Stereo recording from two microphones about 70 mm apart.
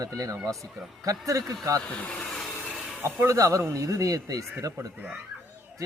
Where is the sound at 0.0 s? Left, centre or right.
Right.